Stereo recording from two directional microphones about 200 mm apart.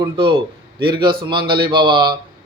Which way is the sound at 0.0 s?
25° right (ahead or behind).